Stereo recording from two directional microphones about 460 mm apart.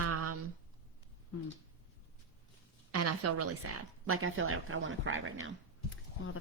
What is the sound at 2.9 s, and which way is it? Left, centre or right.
Speech, right.